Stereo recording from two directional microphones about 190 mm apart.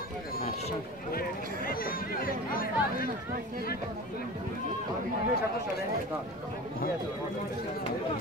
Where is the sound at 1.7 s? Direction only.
50° left (ahead or behind).